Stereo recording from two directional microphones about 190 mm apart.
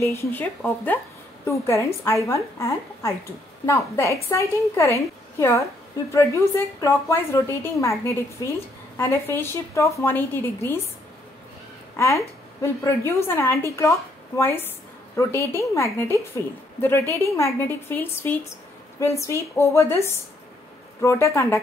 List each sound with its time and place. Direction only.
0.0 s a woman's voice: 15° left (ahead or behind)
8.9 s a woman's voice: 15° left (ahead or behind)
12.0 s a woman's voice: 15° left (ahead or behind)